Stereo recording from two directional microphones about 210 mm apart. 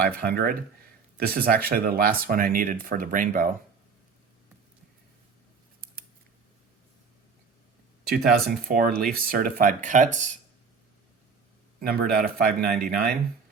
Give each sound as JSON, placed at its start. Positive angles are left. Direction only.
{"t": 0.0, "sound": "speech", "side_deg": -45}
{"t": 5.8, "sound": "scissors", "side_deg": -45}
{"t": 8.0, "sound": "speech", "side_deg": -50}
{"t": 11.8, "sound": "speech", "side_deg": -45}